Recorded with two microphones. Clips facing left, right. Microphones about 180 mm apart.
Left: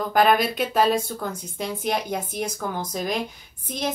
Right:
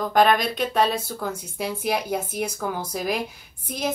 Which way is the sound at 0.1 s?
5° left (ahead or behind).